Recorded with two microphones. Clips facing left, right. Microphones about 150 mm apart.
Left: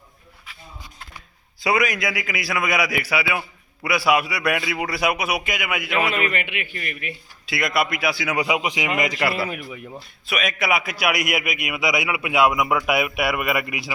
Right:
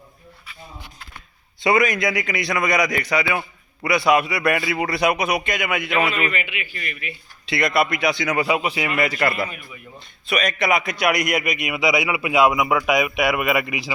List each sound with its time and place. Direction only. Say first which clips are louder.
1.6 s a man's voice: right 3 dB; centre (ahead or behind)
6.3 s a man's voice: left 1 dB; 55° left (ahead or behind)
7.4 s a man's voice: right 3 dB; centre (ahead or behind)